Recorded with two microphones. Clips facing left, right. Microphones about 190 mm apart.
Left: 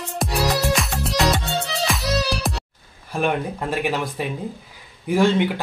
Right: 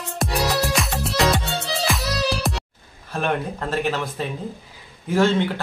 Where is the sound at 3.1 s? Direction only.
10° left (ahead or behind).